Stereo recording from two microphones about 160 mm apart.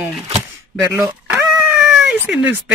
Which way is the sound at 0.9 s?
5° right (ahead or behind).